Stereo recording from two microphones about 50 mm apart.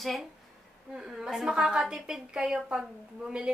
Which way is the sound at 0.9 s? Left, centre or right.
Centre.